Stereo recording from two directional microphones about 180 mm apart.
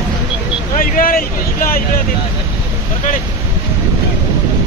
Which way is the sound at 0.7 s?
50° left (ahead or behind).